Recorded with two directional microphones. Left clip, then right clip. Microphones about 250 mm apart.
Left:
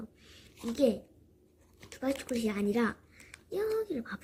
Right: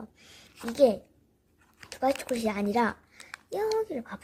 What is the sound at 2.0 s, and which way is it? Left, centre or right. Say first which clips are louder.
Speech: right 6 dB; right.